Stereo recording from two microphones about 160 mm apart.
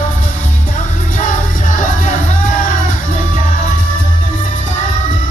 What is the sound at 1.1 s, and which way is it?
Music, 55° left (ahead or behind).